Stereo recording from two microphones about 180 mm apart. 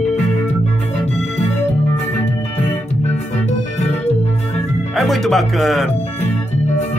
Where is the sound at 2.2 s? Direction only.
40° left (ahead or behind).